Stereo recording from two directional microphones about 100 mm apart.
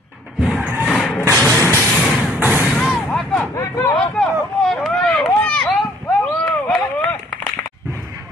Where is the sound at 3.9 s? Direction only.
5° left (ahead or behind).